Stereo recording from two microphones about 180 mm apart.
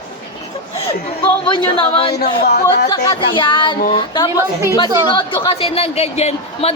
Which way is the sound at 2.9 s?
25° left (ahead or behind).